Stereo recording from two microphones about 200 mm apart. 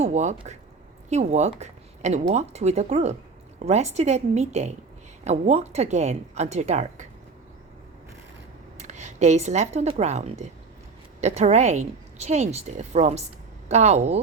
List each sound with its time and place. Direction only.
0.0 s speech: 35° right (ahead or behind)
8.8 s a woman's voice: 35° right (ahead or behind)